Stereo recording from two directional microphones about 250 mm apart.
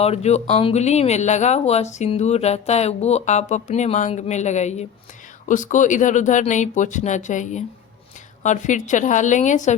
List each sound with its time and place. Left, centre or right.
0.0 s speech: left